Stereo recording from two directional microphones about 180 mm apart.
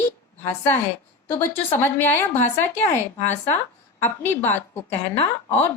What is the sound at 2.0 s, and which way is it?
Speech, 10° left (ahead or behind).